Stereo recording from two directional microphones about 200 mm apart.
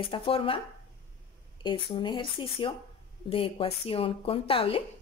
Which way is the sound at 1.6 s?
25° left (ahead or behind).